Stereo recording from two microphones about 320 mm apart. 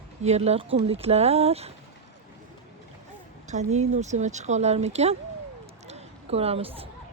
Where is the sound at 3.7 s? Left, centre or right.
Right.